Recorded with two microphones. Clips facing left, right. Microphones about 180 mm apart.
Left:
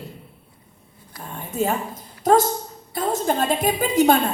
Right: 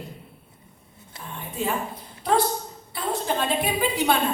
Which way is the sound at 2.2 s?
45° left (ahead or behind).